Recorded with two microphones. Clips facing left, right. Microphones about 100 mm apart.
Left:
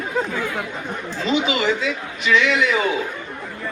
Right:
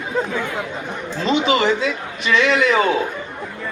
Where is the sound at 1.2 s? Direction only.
30° right (ahead or behind).